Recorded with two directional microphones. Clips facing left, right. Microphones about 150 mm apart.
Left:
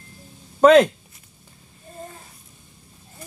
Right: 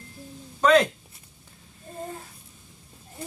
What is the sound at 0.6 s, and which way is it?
Speech, 55° left (ahead or behind).